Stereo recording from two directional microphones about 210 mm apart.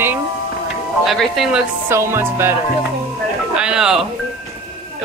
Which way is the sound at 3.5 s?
5° right (ahead or behind).